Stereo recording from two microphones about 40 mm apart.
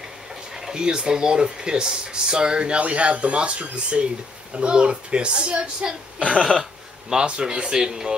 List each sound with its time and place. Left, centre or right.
0.7 s speech: centre